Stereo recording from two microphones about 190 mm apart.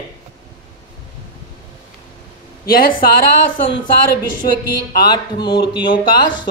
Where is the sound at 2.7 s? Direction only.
50° left (ahead or behind).